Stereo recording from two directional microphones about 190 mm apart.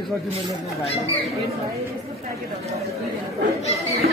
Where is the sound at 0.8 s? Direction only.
35° left (ahead or behind).